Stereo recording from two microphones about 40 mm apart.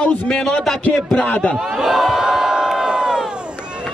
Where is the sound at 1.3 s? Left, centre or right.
Left.